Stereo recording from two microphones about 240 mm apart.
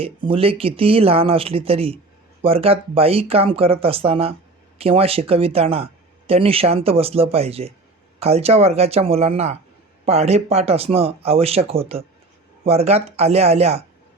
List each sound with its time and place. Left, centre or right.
0.0 s speech: right